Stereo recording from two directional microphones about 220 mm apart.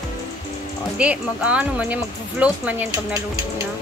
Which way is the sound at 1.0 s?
5° right (ahead or behind).